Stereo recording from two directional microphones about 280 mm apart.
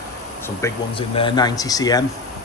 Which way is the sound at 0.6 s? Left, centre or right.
Centre.